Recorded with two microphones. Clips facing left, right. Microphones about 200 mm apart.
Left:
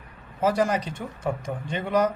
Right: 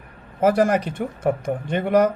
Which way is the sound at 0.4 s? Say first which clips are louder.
Right 5 dB; 55° right (ahead or behind).